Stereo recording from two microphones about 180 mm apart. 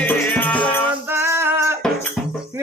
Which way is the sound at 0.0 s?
10° left (ahead or behind).